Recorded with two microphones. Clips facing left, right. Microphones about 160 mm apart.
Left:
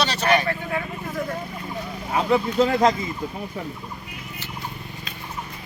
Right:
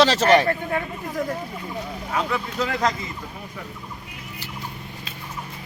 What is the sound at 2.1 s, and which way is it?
Speech, 25° left (ahead or behind).